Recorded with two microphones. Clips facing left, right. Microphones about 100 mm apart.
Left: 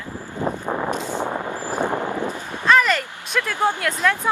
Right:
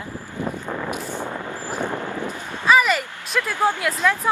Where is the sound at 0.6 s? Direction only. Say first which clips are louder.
Left 4 dB; 25° left (ahead or behind).